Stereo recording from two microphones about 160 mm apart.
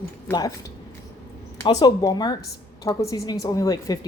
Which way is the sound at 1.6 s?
25° left (ahead or behind).